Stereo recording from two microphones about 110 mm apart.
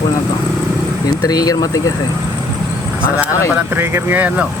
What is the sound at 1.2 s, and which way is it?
Speech, 35° left (ahead or behind).